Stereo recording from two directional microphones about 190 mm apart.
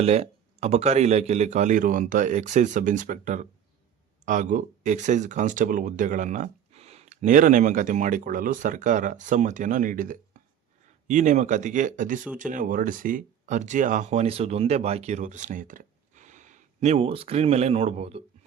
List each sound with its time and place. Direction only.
0.0 s speech: 35° right (ahead or behind)